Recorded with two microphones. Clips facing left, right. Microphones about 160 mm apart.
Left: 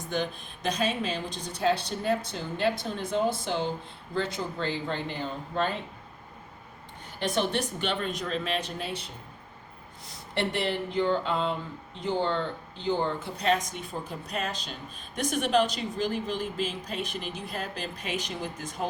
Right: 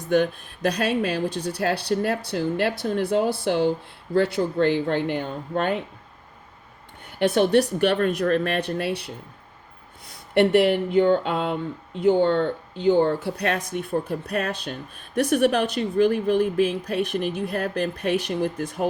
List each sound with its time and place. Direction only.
0.1 s speech: 60° right (ahead or behind)
7.2 s speech: 60° right (ahead or behind)